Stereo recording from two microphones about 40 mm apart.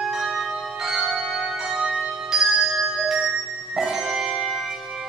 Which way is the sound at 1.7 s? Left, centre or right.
Right.